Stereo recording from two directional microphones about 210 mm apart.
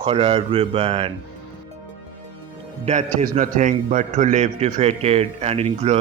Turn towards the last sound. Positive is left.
turn(degrees=-30)  # may be behind; listen again after turning